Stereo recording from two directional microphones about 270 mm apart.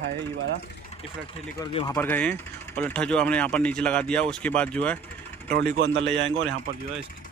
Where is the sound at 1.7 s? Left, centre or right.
Centre.